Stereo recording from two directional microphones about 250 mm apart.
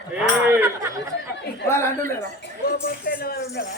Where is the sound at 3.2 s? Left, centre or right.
Left.